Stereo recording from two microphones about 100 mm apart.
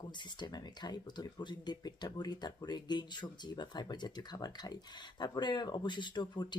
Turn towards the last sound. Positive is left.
turn(degrees=50)  # may be behind; listen again after turning